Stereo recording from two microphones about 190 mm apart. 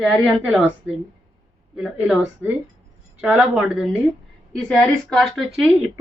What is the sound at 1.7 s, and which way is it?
Speech, 5° right (ahead or behind).